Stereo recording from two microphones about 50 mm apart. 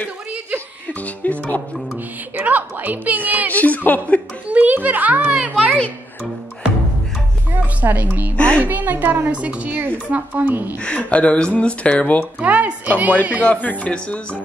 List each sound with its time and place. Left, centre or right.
0.8 s speech: left
2.3 s a woman's voice: right
3.5 s a woman's voice: left
4.5 s a woman's voice: right
5.4 s a woman's voice: right
7.8 s a woman's voice: right
8.4 s speech: left
8.6 s a woman's voice: right
9.3 s a woman's voice: right
9.7 s a woman's voice: right
10.0 s a woman's voice: right
10.8 s speech: left
12.4 s a woman's voice: right
13.5 s speech: left